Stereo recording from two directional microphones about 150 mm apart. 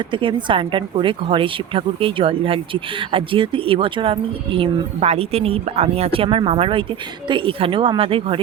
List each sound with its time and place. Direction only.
0.1 s speech: 35° right (ahead or behind)